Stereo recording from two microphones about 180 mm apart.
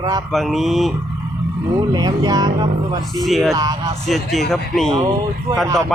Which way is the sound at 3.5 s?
20° right (ahead or behind).